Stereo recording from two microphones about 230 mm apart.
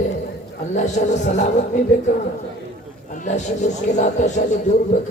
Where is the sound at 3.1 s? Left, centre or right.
Left.